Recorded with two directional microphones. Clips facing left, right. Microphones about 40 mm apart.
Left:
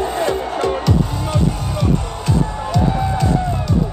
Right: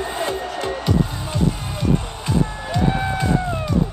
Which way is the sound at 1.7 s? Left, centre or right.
Right.